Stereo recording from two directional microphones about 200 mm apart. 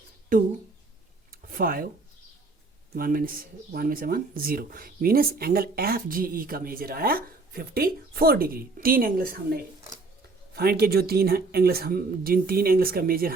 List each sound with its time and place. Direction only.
0.3 s speech: 40° right (ahead or behind)
1.3 s a sound: 45° right (ahead or behind)
2.9 s speech: 45° right (ahead or behind)